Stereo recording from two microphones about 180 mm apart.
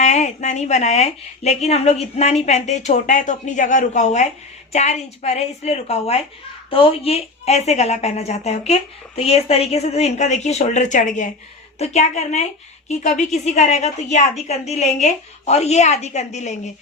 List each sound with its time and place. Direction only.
0.0 s a woman's voice: 40° left (ahead or behind)